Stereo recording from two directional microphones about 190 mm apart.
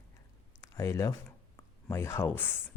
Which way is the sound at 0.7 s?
15° left (ahead or behind).